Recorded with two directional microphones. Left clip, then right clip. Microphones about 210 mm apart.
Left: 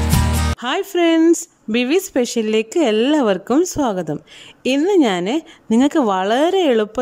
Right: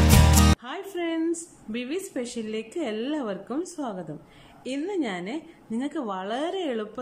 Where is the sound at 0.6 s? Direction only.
50° left (ahead or behind).